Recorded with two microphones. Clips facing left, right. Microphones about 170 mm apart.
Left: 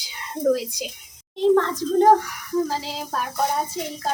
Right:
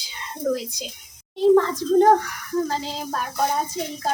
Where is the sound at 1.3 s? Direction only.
5° right (ahead or behind).